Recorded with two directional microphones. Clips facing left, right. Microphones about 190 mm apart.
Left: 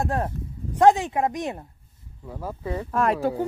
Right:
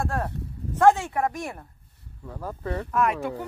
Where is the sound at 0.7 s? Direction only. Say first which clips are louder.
Left 2 dB; 15° left (ahead or behind).